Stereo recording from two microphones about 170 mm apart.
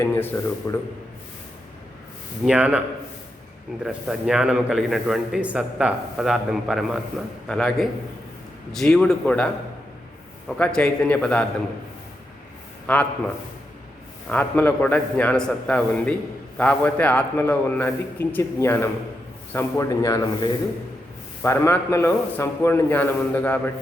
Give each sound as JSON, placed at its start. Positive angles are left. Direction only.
{"t": 0.0, "sound": "speech", "side_deg": 10}
{"t": 2.4, "sound": "a man's voice", "side_deg": -5}
{"t": 3.8, "sound": "a man's voice", "side_deg": 0}
{"t": 10.6, "sound": "a man's voice", "side_deg": 5}
{"t": 12.9, "sound": "a man's voice", "side_deg": 5}